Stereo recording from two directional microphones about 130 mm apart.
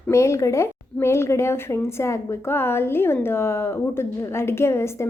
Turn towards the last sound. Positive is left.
turn(degrees=20)  # may be behind; listen again after turning